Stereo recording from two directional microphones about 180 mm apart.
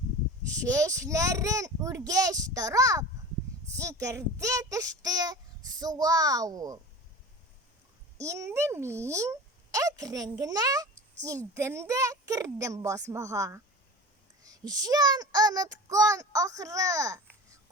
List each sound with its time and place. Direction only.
0.6 s a child's voice: 20° right (ahead or behind)
8.2 s a child's voice: 15° right (ahead or behind)